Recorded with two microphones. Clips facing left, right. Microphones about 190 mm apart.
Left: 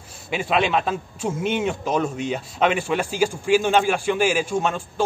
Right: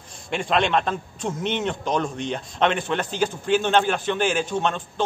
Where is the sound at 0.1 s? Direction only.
5° left (ahead or behind).